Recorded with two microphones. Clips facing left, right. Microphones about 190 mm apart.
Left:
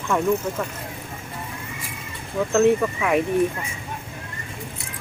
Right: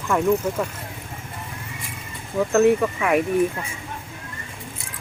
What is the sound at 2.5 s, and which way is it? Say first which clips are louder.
Speech: right 1 dB; 5° right (ahead or behind).